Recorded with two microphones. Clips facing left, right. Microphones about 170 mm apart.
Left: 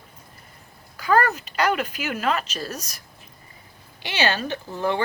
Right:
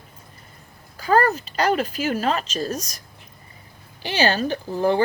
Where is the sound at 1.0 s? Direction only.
35° right (ahead or behind).